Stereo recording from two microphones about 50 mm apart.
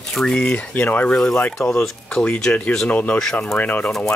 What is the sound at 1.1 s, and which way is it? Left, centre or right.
Speech, centre.